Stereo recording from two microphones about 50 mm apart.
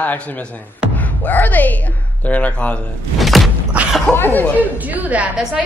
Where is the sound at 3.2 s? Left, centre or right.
Centre.